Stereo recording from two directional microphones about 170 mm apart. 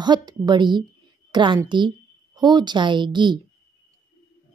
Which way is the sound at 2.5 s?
25° right (ahead or behind).